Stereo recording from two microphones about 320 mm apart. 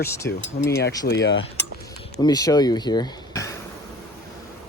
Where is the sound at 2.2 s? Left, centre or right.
Centre.